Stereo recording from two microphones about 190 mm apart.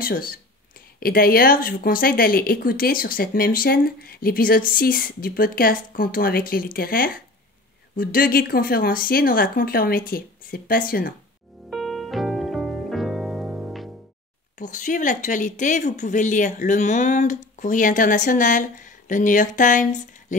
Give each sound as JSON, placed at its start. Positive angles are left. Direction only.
{"t": 0.0, "sound": "speech", "side_deg": 50}
{"t": 11.7, "sound": "music", "side_deg": 0}
{"t": 14.6, "sound": "speech", "side_deg": 40}